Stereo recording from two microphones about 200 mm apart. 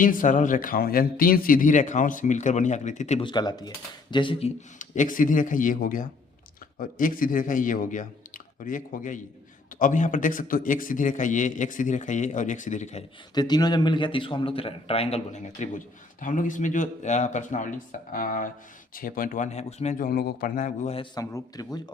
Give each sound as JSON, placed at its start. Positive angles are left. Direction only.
{"t": 0.0, "sound": "a man's voice", "side_deg": 40}
{"t": 3.2, "sound": "a man's voice", "side_deg": 20}
{"t": 13.3, "sound": "a man's voice", "side_deg": 20}
{"t": 21.2, "sound": "a man's voice", "side_deg": 20}